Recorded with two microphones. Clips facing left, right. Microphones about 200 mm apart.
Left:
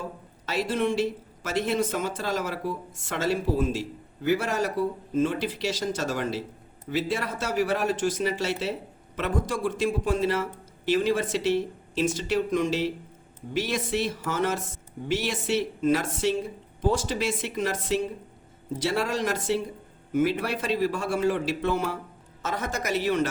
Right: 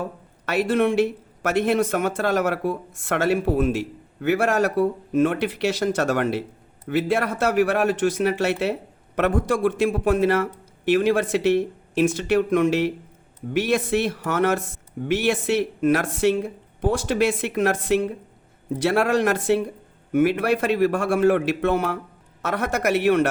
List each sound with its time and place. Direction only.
0.0 s speech: 60° right (ahead or behind)